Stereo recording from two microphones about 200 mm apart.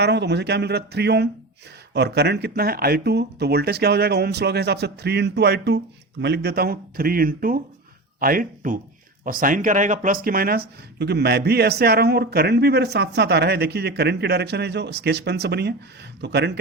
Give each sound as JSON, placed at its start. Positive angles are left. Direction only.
{"t": 0.0, "sound": "speech", "side_deg": -60}